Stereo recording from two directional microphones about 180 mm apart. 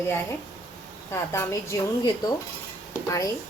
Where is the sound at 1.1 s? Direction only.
15° left (ahead or behind).